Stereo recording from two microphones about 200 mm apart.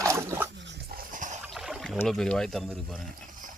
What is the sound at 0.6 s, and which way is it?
Dog, 55° right (ahead or behind).